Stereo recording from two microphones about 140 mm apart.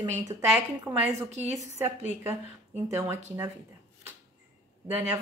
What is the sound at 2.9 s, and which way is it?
Speech, 20° right (ahead or behind).